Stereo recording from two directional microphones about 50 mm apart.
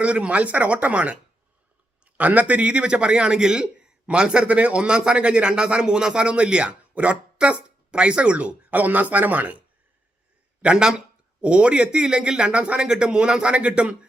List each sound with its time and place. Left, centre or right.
0.0 s speech: right
10.6 s speech: centre